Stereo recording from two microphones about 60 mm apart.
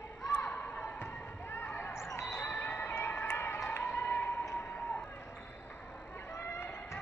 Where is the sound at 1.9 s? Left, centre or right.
Left.